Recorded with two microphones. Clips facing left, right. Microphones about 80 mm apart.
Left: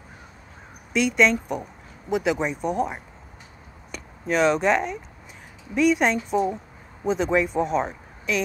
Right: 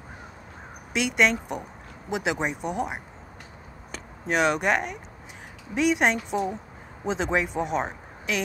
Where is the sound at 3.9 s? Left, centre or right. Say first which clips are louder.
Left 2 dB; right.